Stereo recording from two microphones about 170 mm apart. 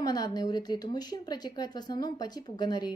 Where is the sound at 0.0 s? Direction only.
25° left (ahead or behind).